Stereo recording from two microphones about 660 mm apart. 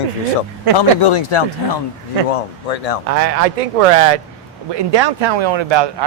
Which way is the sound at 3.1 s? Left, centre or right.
Right.